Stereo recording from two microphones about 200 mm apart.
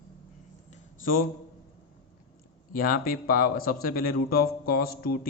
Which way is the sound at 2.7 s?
45° left (ahead or behind).